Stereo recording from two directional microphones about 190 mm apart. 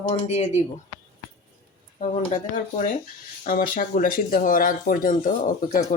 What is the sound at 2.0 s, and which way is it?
Speech, 40° left (ahead or behind).